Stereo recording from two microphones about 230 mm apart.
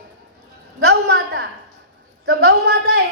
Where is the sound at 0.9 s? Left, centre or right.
Right.